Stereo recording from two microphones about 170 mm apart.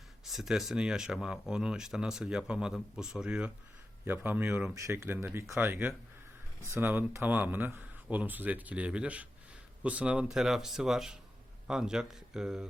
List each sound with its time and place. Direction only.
0.3 s speech: centre (ahead or behind)